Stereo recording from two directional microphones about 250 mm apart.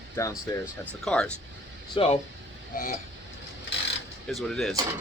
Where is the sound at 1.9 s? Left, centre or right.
Left.